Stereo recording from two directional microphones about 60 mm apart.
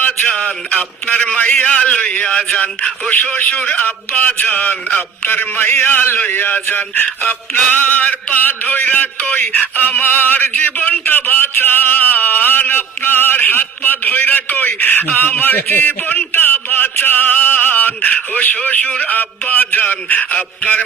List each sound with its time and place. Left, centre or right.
0.0 s a man's voice: left
3.1 s speech: left